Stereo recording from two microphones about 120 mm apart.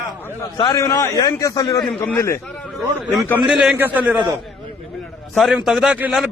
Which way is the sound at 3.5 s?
5° right (ahead or behind).